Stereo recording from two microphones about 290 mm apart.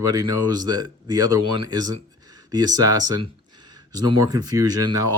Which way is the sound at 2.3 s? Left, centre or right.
Centre.